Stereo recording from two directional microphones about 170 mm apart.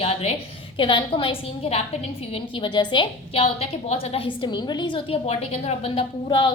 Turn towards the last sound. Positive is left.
turn(degrees=30)  # may be behind; listen again after turning